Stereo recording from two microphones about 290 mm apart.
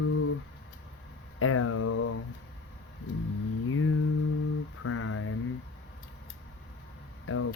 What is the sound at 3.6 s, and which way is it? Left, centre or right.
Music, left.